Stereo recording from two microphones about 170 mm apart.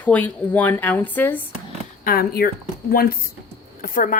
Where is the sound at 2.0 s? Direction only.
60° left (ahead or behind).